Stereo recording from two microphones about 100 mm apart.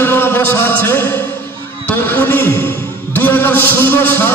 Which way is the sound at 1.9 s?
20° left (ahead or behind).